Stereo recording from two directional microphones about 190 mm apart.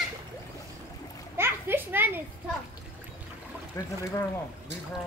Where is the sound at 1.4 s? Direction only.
10° right (ahead or behind).